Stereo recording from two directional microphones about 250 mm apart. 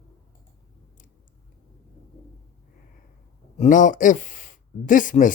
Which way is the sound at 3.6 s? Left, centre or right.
Left.